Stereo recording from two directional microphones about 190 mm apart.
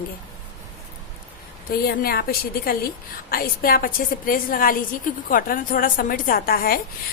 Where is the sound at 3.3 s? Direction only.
50° left (ahead or behind).